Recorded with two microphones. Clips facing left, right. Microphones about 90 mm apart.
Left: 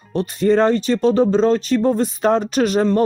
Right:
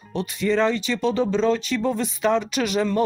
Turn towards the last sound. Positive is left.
turn(degrees=40)  # may be behind; listen again after turning